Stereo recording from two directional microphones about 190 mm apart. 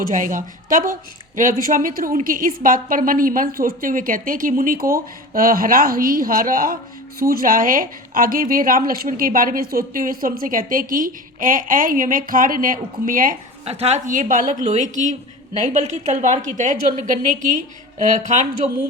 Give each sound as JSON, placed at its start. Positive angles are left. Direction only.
{"t": 0.0, "sound": "speech", "side_deg": -45}
{"t": 13.7, "sound": "a woman's voice", "side_deg": -35}